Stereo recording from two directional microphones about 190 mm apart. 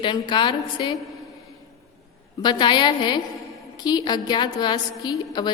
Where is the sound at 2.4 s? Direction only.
25° left (ahead or behind).